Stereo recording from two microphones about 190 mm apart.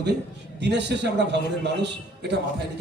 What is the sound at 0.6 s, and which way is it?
A man's voice, 65° right (ahead or behind).